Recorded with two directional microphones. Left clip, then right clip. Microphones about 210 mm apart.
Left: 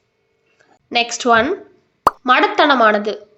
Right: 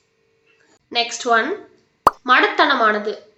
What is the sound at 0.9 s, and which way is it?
Speech, 50° left (ahead or behind).